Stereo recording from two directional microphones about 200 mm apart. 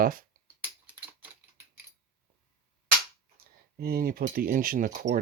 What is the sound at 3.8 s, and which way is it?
Speech, 50° right (ahead or behind).